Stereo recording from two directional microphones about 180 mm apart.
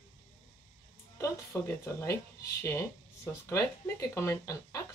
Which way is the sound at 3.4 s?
15° left (ahead or behind).